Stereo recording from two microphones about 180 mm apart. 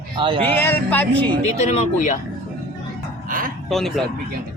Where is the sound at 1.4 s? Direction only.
40° left (ahead or behind).